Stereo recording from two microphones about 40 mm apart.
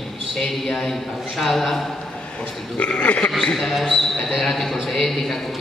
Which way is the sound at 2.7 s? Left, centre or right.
Left.